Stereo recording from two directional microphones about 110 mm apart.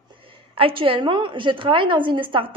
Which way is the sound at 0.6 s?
55° right (ahead or behind).